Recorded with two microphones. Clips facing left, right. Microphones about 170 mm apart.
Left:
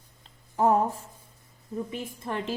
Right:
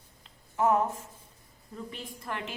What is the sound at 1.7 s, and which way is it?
Speech, 20° left (ahead or behind).